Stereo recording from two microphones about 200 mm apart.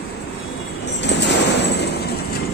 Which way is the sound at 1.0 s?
60° left (ahead or behind).